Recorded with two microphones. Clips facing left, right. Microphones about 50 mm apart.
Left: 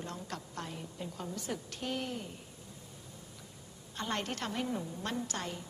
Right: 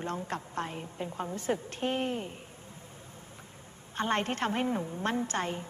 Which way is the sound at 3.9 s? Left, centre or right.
Right.